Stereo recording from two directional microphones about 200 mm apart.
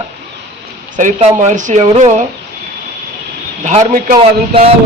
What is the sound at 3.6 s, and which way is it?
Speech, 40° right (ahead or behind).